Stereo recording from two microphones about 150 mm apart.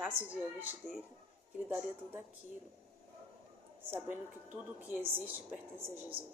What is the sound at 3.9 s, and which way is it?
A woman's voice, 15° right (ahead or behind).